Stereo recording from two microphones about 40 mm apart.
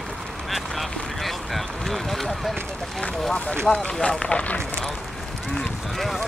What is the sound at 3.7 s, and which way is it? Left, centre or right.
Speech, left.